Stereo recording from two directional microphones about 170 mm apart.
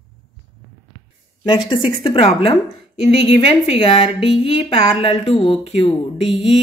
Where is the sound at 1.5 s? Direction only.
30° left (ahead or behind).